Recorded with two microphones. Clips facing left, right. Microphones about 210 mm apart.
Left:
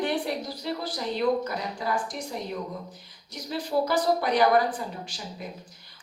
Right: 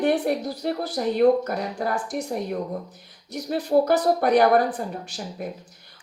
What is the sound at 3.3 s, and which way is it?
A woman's voice, 60° right (ahead or behind).